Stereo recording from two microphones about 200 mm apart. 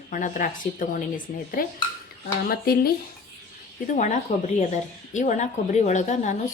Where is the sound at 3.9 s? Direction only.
35° left (ahead or behind).